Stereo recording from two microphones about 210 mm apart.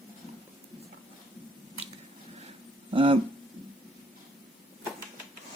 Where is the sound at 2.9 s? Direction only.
25° right (ahead or behind).